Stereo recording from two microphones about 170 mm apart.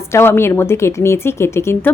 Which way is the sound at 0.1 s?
15° left (ahead or behind).